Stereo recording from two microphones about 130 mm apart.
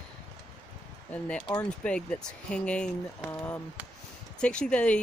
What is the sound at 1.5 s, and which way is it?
Speech, 10° left (ahead or behind).